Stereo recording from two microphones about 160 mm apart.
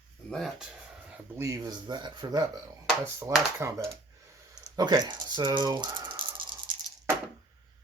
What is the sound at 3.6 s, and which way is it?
Speech, 20° right (ahead or behind).